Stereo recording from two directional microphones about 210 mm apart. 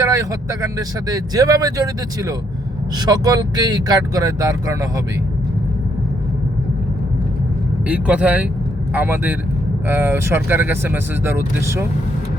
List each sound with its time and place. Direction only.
0.0 s speech: 15° right (ahead or behind)
7.9 s speech: 5° right (ahead or behind)